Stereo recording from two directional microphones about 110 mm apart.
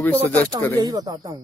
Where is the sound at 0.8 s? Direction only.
35° right (ahead or behind).